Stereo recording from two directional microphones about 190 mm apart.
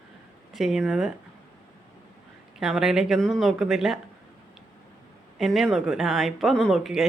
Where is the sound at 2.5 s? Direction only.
5° right (ahead or behind).